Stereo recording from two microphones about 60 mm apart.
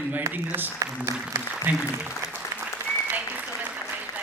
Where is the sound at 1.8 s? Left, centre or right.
Right.